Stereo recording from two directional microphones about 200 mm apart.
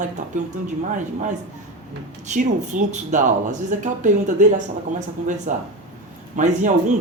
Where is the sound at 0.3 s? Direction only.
40° right (ahead or behind).